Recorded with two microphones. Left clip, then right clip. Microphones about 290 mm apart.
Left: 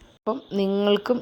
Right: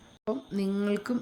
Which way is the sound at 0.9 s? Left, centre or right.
Left.